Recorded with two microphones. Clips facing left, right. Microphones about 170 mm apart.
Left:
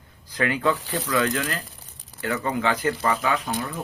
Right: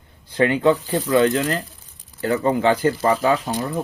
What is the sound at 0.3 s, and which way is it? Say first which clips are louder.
Speech: right 7 dB; 25° right (ahead or behind).